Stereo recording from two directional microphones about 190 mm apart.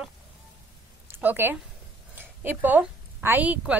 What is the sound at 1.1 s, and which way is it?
A woman's voice, 10° right (ahead or behind).